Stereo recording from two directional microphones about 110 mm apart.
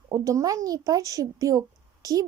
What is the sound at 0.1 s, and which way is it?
Speech, 30° right (ahead or behind).